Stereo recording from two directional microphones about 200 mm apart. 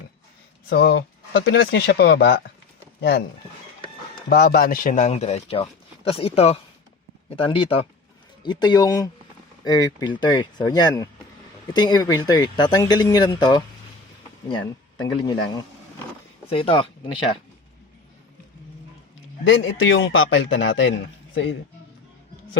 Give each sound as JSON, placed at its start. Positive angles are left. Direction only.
{"t": 0.7, "sound": "speech", "side_deg": 55}
{"t": 4.3, "sound": "speech", "side_deg": 50}
{"t": 15.0, "sound": "speech", "side_deg": 20}
{"t": 16.5, "sound": "speech", "side_deg": 30}
{"t": 19.5, "sound": "a man's voice", "side_deg": 70}